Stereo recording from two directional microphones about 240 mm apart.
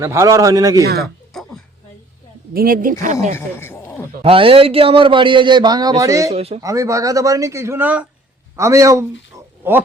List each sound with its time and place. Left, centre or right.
0.0 s speech: centre
1.3 s a sound: centre
2.5 s speech: right
3.3 s speech: centre
4.2 s speech: right
6.3 s speech: right
6.6 s speech: centre